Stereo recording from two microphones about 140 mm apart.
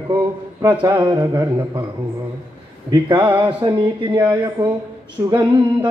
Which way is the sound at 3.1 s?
30° right (ahead or behind).